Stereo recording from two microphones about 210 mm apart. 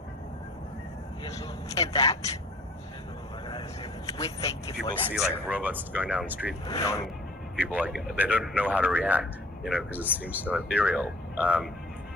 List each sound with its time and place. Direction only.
1.2 s vehicle: 15° left (ahead or behind)
1.9 s speech: 15° left (ahead or behind)
3.4 s vehicle: 20° left (ahead or behind)
4.4 s speech: 15° left (ahead or behind)
5.0 s speech: centre (ahead or behind)
6.8 s speech: 15° left (ahead or behind)
7.5 s speech: 5° right (ahead or behind)